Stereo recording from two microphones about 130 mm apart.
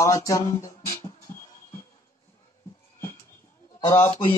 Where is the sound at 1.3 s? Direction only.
20° left (ahead or behind).